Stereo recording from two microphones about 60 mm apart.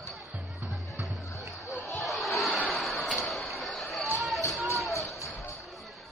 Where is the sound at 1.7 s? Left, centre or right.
Left.